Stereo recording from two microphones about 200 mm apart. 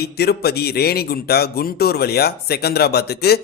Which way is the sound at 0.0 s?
55° left (ahead or behind).